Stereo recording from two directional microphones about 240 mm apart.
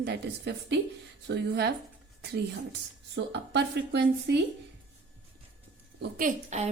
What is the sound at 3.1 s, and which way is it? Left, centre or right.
A woman's voice, right.